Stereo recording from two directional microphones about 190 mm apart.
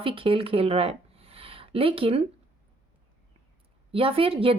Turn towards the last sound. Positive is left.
turn(degrees=-30)  # may be behind; listen again after turning